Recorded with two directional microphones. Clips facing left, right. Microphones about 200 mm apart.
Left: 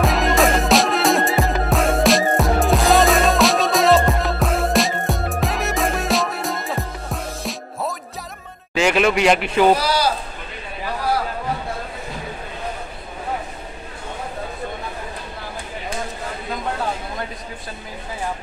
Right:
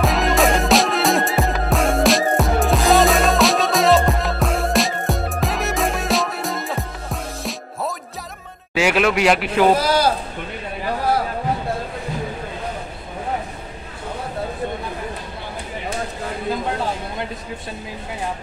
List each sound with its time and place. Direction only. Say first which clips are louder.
0.0 s music: even; centre (ahead or behind)
8.7 s a man's voice: even; 5° right (ahead or behind)
9.8 s a sound: right 2 dB; 50° right (ahead or behind)